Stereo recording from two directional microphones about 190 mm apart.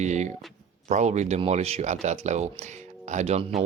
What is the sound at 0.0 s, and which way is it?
Speech, 40° right (ahead or behind).